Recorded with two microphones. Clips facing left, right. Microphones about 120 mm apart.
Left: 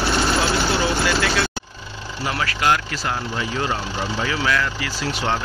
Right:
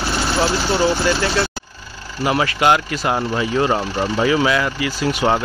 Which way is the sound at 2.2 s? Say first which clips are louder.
Right 6 dB; 20° right (ahead or behind).